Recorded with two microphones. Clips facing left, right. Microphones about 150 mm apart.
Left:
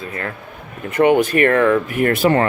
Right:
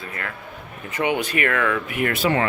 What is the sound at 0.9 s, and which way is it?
Speech, 50° left (ahead or behind).